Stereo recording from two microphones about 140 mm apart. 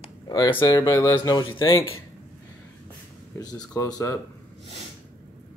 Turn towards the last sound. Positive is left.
turn(degrees=25)  # may be behind; listen again after turning